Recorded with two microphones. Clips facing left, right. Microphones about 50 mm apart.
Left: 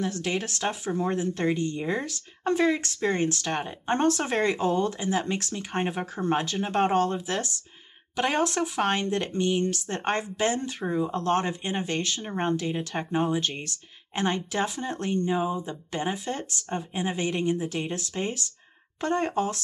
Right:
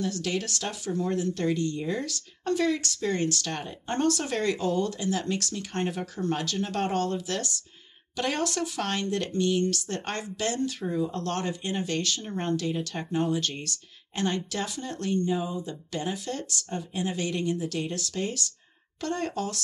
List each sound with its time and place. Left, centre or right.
0.0 s speech: left
10.9 s speech: left
11.1 s speech: left